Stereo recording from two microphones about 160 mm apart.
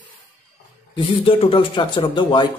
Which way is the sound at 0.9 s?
35° left (ahead or behind).